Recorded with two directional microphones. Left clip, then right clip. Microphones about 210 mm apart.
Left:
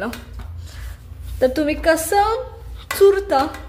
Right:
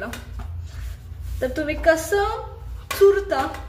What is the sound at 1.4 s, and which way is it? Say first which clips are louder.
A woman's voice: left 6 dB; 40° left (ahead or behind).